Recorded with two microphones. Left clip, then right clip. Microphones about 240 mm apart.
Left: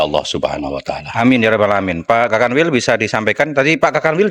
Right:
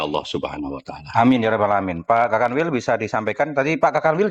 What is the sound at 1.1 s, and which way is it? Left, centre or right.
A man's voice, left.